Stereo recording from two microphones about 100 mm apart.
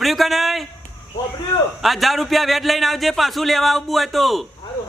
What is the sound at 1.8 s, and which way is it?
Speech, centre (ahead or behind).